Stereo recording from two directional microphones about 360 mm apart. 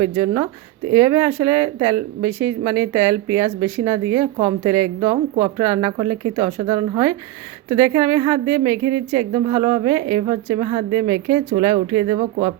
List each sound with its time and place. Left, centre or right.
0.0 s a woman's voice: centre
6.7 s a woman's voice: centre
7.8 s a woman's voice: centre